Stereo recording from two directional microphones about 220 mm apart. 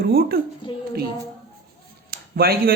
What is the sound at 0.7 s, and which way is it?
Speech, 20° left (ahead or behind).